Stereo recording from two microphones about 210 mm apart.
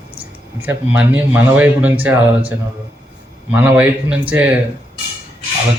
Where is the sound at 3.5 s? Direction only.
10° right (ahead or behind).